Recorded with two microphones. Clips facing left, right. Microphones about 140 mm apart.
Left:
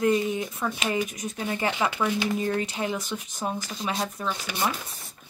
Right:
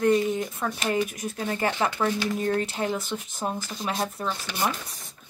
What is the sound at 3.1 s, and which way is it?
Speech, centre (ahead or behind).